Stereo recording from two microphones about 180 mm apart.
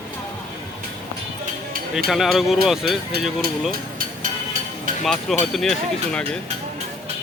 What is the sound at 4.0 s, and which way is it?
Music, 45° right (ahead or behind).